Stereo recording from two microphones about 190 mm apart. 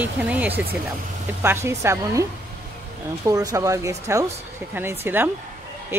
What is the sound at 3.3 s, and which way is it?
Speech, 15° right (ahead or behind).